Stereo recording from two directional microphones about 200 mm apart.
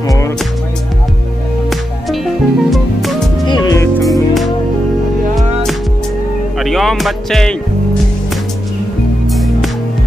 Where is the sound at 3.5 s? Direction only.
20° left (ahead or behind).